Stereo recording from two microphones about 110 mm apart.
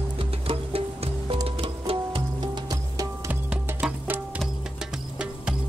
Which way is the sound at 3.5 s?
10° right (ahead or behind).